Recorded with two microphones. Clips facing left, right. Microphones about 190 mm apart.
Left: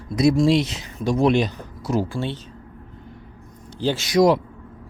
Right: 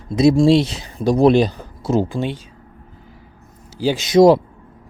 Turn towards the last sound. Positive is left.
turn(degrees=-25)  # may be behind; listen again after turning